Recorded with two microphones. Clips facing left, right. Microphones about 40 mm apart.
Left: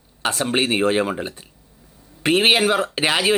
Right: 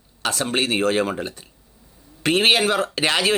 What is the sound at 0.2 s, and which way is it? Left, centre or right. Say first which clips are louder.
Speech: left 2 dB; left.